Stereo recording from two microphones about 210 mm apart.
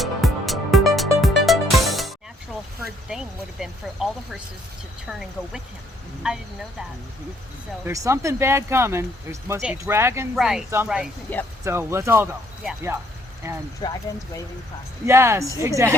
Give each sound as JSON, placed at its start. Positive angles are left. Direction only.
{"t": 0.0, "sound": "music", "side_deg": 0}
{"t": 3.1, "sound": "speech", "side_deg": 0}
{"t": 7.9, "sound": "speech", "side_deg": -15}
{"t": 13.8, "sound": "speech", "side_deg": 20}
{"t": 15.0, "sound": "speech", "side_deg": -10}